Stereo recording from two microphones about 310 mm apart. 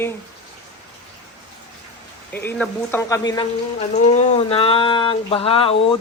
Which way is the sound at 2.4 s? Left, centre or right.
Centre.